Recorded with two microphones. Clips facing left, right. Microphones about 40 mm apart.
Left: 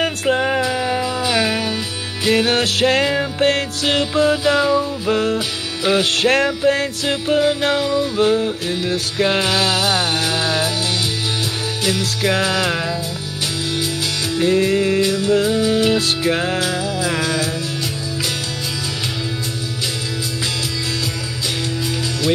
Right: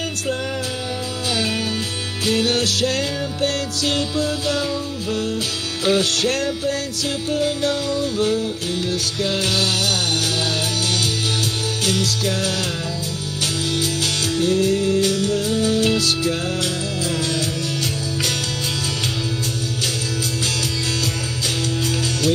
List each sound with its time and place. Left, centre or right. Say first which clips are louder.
0.0 s music: left 7 dB; left
14.4 s music: left 3 dB; left